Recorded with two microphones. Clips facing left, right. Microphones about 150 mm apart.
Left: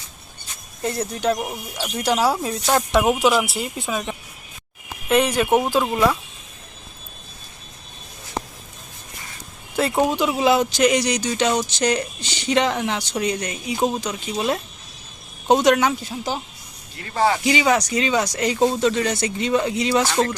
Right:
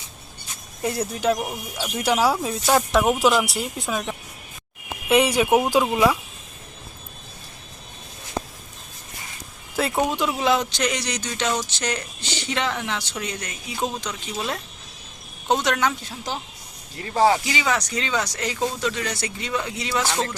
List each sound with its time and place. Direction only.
0.8 s speech: 5° right (ahead or behind)
5.0 s speech: 10° right (ahead or behind)
9.7 s speech: centre (ahead or behind)
16.0 s speech: 5° left (ahead or behind)
17.4 s speech: 20° left (ahead or behind)
18.6 s speech: 25° left (ahead or behind)